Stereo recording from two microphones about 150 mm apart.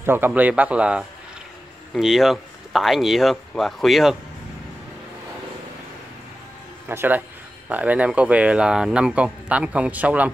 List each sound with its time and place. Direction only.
0.0 s speech: 15° right (ahead or behind)
6.9 s speech: 15° right (ahead or behind)